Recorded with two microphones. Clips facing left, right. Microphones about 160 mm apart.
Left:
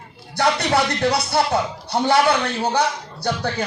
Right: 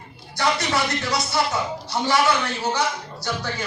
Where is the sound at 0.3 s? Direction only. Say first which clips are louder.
Left 4 dB; 60° left (ahead or behind).